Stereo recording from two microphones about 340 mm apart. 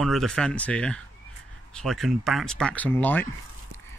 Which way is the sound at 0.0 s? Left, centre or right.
Centre.